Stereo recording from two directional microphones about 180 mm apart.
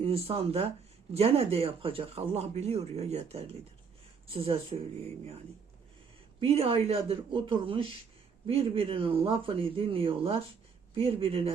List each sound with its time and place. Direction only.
0.0 s speech: 30° right (ahead or behind)
6.4 s speech: 30° right (ahead or behind)